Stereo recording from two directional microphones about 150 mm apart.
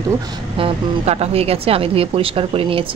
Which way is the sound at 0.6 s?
40° right (ahead or behind).